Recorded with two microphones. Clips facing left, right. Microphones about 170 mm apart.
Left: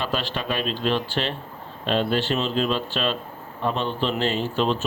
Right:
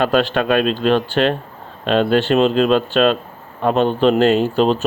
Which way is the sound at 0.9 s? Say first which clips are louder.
Right 9 dB; 55° right (ahead or behind).